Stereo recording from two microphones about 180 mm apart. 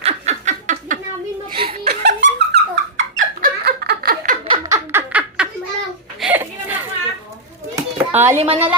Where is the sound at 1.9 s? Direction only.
65° right (ahead or behind).